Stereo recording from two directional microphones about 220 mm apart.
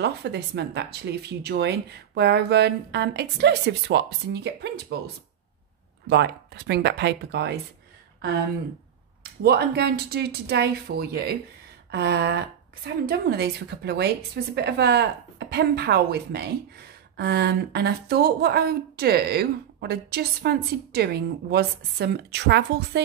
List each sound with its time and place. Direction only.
0.0 s a woman's voice: 50° right (ahead or behind)
6.0 s a woman's voice: 50° right (ahead or behind)
9.4 s a woman's voice: 45° right (ahead or behind)